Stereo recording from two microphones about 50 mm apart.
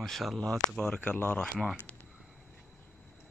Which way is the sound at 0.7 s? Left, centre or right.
Centre.